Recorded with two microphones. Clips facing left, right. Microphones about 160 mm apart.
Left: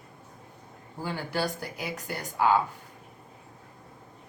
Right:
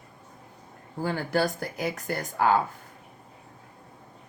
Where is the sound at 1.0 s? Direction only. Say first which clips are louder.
Right 4 dB; 50° right (ahead or behind).